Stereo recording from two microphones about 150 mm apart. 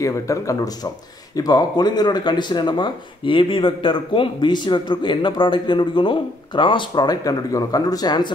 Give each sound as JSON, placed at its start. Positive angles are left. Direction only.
{"t": 0.0, "sound": "speech", "side_deg": 20}